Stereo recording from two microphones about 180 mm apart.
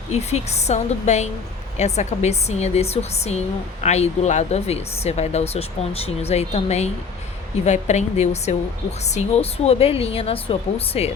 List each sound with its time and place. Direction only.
0.1 s speech: 35° left (ahead or behind)